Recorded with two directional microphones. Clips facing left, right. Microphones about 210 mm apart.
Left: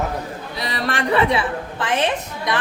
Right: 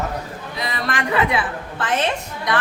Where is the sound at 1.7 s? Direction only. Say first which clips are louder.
Even; 15° left (ahead or behind).